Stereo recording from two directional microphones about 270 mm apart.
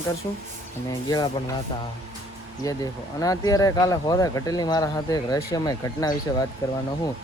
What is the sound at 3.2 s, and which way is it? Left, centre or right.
Speech, centre.